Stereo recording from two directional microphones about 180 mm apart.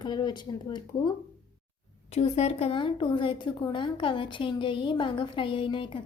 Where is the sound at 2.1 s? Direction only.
35° left (ahead or behind).